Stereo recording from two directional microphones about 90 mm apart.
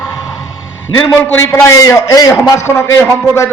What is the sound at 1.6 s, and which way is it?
Speech, 35° left (ahead or behind).